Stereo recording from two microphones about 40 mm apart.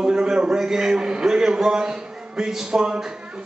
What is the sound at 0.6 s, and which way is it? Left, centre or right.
A man's voice, centre.